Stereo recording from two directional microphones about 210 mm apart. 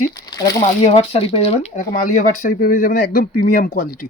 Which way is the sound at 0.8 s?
30° left (ahead or behind).